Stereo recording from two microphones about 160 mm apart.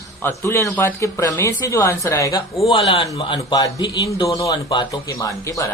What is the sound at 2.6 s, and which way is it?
A man's voice, 35° left (ahead or behind).